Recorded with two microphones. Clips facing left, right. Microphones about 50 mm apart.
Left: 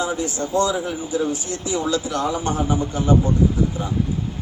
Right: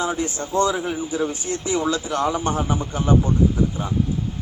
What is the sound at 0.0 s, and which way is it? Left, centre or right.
A man's voice, right.